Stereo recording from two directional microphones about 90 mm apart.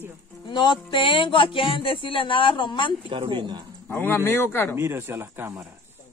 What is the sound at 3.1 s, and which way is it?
Speech, 65° right (ahead or behind).